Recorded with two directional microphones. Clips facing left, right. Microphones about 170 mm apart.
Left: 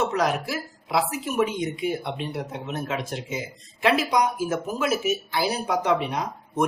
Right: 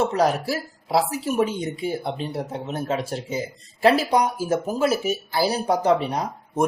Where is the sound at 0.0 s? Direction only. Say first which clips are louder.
Right 3 dB; 30° right (ahead or behind).